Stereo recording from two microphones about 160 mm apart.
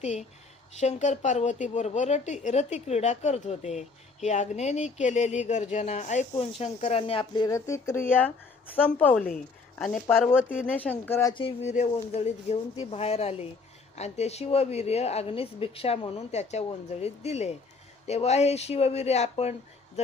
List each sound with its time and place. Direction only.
0.0 s a woman's voice: 45° left (ahead or behind); by 10.0 s 5° left (ahead or behind)
10.2 s speech: 15° left (ahead or behind)
11.4 s a woman's voice: 45° left (ahead or behind)